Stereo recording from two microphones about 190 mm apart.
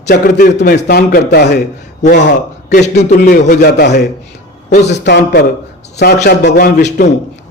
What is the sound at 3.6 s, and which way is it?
A man's voice, 60° left (ahead or behind).